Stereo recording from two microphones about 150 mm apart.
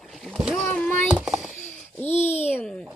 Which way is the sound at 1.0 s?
5° right (ahead or behind).